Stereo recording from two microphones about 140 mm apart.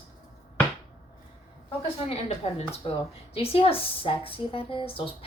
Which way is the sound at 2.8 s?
40° left (ahead or behind).